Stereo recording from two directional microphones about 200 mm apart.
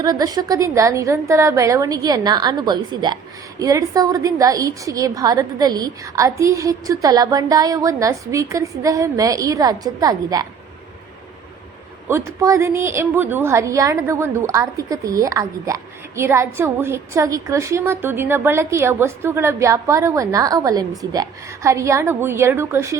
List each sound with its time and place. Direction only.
0.0 s a woman's voice: 20° right (ahead or behind)
12.0 s a woman's voice: 15° right (ahead or behind)